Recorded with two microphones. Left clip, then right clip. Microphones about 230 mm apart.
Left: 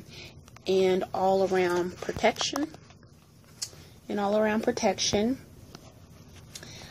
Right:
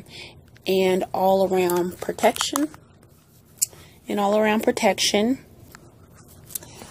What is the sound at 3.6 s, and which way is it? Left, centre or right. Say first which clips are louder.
Speech: right 8 dB; right.